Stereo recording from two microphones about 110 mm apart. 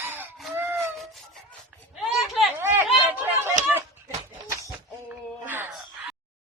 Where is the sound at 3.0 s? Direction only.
15° right (ahead or behind).